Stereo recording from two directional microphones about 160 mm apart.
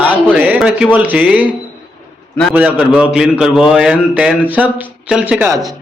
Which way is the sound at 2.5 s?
10° right (ahead or behind).